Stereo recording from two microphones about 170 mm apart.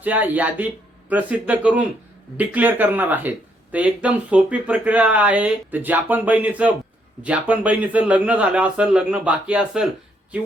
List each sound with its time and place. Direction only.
0.0 s speech: 10° right (ahead or behind)